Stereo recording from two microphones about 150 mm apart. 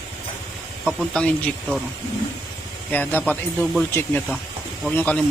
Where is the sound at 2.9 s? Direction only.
10° left (ahead or behind).